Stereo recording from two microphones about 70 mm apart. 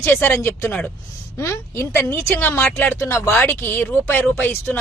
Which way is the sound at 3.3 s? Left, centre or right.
Left.